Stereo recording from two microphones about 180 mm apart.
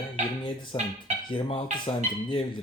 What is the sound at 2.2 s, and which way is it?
Speech, 25° left (ahead or behind).